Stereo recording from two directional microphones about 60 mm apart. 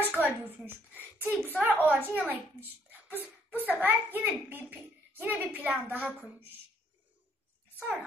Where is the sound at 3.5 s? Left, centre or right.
Right.